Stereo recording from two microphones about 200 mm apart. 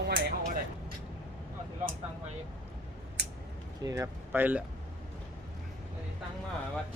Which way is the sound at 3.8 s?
15° right (ahead or behind).